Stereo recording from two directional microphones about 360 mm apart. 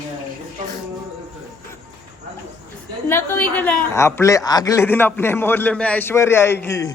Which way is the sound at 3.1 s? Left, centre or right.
Centre.